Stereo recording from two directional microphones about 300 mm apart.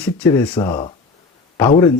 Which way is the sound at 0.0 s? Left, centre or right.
Centre.